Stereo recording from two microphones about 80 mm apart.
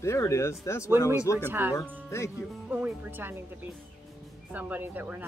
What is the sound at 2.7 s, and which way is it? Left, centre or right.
Speech, right.